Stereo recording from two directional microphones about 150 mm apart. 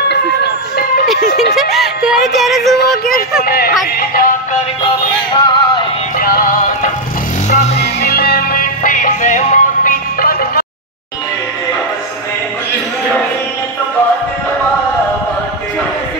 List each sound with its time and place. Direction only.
1.5 s music: centre (ahead or behind)
3.4 s speech: 90° left
5.3 s music: 30° left (ahead or behind)
6.1 s music: 80° left
7.4 s music: 50° left (ahead or behind)
7.8 s music: 90° left; by 10.6 s 70° left (ahead or behind)